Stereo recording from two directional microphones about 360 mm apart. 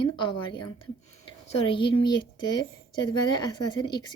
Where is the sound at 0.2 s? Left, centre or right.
Centre.